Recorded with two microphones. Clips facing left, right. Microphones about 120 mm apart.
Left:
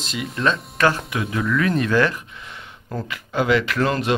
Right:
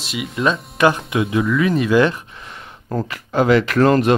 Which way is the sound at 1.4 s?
5° right (ahead or behind).